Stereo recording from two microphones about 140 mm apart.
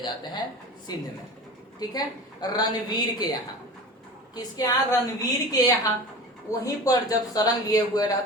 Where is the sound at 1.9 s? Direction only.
30° left (ahead or behind).